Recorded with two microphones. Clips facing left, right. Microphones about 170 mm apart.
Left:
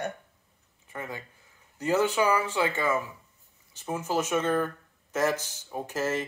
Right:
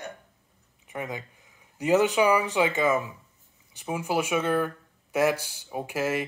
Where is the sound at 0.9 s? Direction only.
15° right (ahead or behind).